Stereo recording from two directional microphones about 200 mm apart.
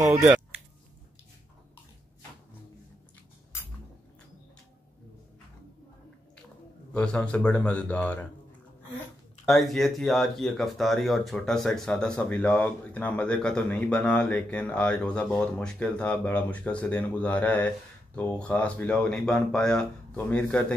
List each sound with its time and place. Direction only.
6.9 s speech: 5° left (ahead or behind)
9.5 s speech: centre (ahead or behind)